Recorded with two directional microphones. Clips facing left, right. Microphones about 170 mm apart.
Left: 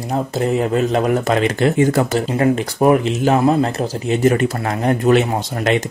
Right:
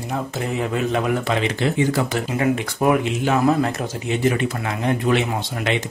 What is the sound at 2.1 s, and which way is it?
Speech, 35° left (ahead or behind).